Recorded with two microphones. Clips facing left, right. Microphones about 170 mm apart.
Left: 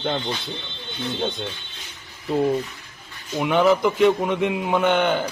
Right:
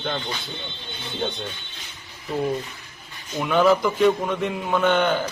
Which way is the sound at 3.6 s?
20° left (ahead or behind).